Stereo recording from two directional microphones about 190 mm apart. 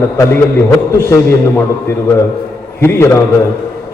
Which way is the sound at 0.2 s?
15° left (ahead or behind).